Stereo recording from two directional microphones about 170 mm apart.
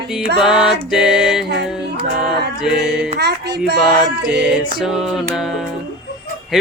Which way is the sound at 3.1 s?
75° right (ahead or behind).